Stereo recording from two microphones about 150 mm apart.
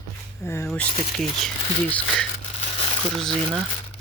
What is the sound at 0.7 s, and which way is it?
Speech, 5° left (ahead or behind).